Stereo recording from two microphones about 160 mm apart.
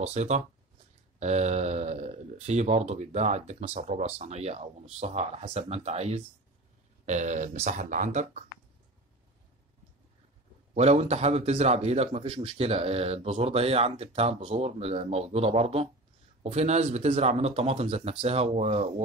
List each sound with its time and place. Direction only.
0.0 s speech: 45° right (ahead or behind)
10.7 s a man's voice: 45° right (ahead or behind)